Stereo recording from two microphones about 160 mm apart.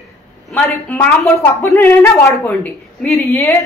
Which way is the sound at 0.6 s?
10° left (ahead or behind).